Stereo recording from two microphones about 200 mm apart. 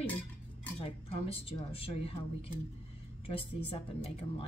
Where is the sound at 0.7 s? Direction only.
30° left (ahead or behind).